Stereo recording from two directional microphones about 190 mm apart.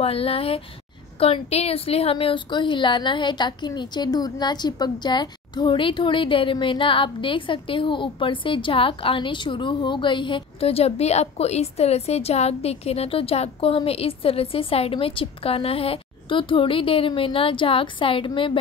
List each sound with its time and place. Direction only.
0.0 s a woman's voice: 30° left (ahead or behind)